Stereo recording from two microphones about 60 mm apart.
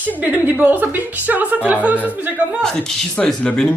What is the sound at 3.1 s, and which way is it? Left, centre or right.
Speech, centre.